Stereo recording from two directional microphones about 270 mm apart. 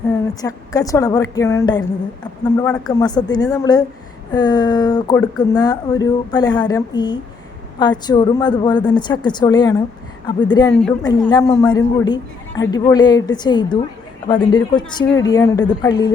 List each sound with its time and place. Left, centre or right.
0.1 s a woman's voice: centre
10.7 s a woman's voice: centre